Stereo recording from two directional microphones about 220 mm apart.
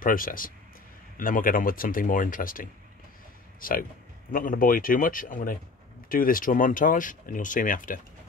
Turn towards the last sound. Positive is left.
turn(degrees=40)  # may be behind; listen again after turning